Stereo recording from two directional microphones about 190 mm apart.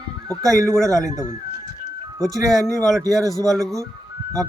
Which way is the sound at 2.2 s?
Centre (ahead or behind).